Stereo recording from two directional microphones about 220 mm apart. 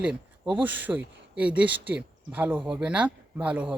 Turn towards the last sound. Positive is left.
turn(degrees=-5)  # may be behind; listen again after turning